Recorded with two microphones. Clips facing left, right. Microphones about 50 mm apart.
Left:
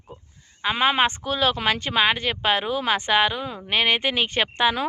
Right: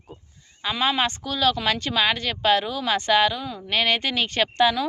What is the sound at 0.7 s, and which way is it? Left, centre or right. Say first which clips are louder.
Speech: left 2 dB; left.